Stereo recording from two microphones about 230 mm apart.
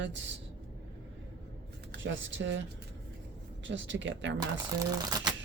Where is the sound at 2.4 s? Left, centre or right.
Right.